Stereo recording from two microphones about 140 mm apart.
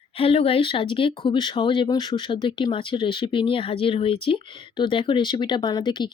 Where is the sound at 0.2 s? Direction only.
40° left (ahead or behind).